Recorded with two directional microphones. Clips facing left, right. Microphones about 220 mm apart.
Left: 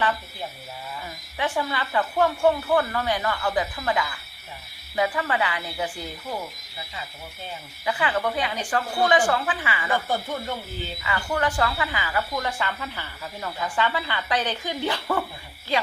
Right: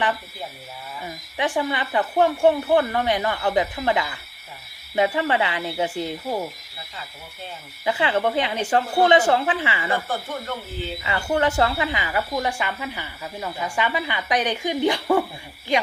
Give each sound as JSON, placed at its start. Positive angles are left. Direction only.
{"t": 1.4, "sound": "speech", "side_deg": -15}
{"t": 7.9, "sound": "speech", "side_deg": -25}
{"t": 11.0, "sound": "speech", "side_deg": -25}